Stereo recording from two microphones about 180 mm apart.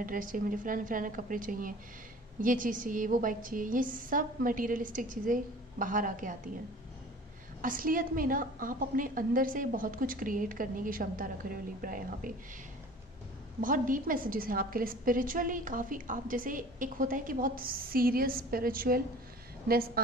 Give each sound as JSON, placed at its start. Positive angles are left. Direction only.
{"t": 0.0, "sound": "a woman's voice", "side_deg": -50}
{"t": 7.6, "sound": "a woman's voice", "side_deg": -50}
{"t": 13.6, "sound": "a woman's voice", "side_deg": -50}